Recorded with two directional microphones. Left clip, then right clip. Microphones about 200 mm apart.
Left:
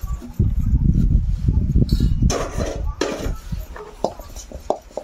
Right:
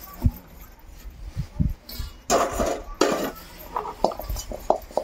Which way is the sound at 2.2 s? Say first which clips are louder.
Right 4 dB; 20° right (ahead or behind).